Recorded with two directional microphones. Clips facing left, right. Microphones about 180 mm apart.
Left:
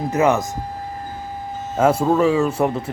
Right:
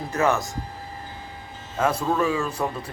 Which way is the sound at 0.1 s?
20° left (ahead or behind).